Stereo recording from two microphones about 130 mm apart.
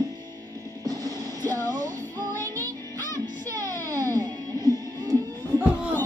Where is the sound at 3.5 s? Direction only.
25° right (ahead or behind).